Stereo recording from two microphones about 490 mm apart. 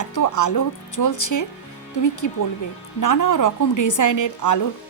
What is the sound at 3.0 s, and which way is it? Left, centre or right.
A woman's voice, left.